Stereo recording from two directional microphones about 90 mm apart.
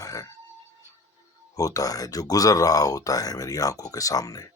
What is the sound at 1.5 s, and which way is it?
Speech, 40° left (ahead or behind).